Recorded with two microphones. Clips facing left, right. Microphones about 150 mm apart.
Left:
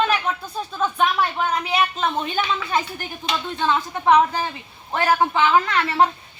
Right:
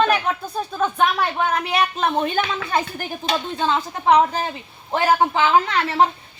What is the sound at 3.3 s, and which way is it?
Speech, 35° right (ahead or behind).